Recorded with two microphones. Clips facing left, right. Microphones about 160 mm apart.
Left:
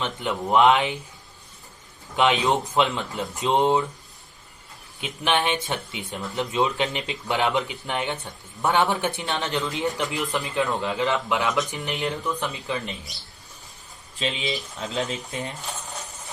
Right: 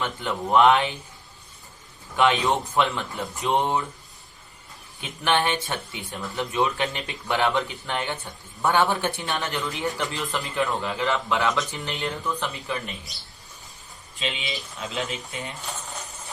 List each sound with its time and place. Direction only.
0.0 s speech: 20° left (ahead or behind)
2.1 s speech: 20° left (ahead or behind)
4.9 s speech: 20° left (ahead or behind)
14.5 s speech: 35° left (ahead or behind)